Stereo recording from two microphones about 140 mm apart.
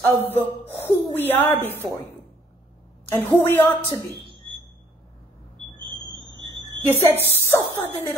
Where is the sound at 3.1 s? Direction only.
15° left (ahead or behind).